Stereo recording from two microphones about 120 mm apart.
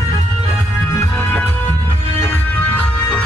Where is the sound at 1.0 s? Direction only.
20° left (ahead or behind).